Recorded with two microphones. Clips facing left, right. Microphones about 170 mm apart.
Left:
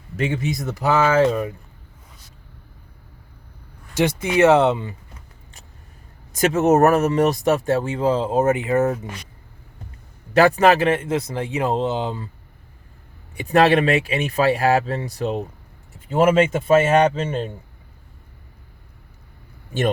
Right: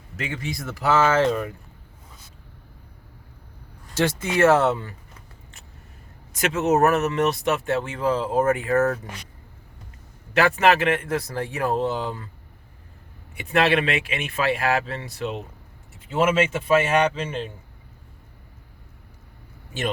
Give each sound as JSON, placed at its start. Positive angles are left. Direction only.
{"t": 0.2, "sound": "speech", "side_deg": 25}
{"t": 3.9, "sound": "speech", "side_deg": 15}
{"t": 6.3, "sound": "speech", "side_deg": 45}
{"t": 10.3, "sound": "speech", "side_deg": 35}
{"t": 13.3, "sound": "speech", "side_deg": 40}